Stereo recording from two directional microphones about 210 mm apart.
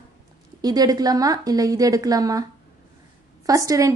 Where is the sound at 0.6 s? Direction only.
20° right (ahead or behind).